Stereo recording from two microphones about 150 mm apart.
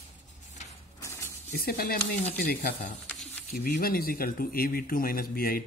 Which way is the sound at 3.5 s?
75° left (ahead or behind).